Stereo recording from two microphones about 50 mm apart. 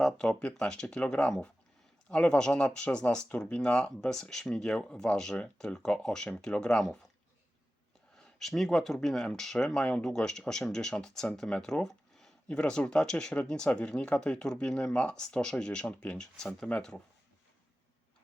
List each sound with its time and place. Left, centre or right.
0.0 s speech: centre
8.2 s speech: centre
9.6 s speech: centre
12.5 s speech: centre
15.9 s speech: left
16.6 s speech: centre